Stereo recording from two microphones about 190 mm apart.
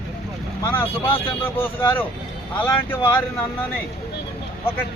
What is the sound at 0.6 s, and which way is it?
Speech, 15° left (ahead or behind).